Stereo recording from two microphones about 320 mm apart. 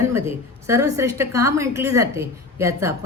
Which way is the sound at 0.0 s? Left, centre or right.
Centre.